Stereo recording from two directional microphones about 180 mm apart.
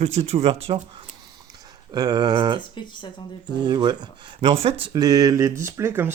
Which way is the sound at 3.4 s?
25° right (ahead or behind).